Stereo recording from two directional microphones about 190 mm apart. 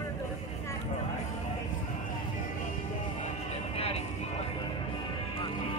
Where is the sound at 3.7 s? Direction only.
30° left (ahead or behind).